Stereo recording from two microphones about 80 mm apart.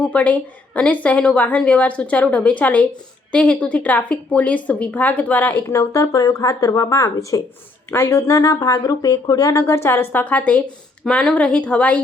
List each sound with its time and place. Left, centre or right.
0.0 s a woman's voice: centre
5.6 s speech: left
7.9 s a woman's voice: left; by 12.0 s centre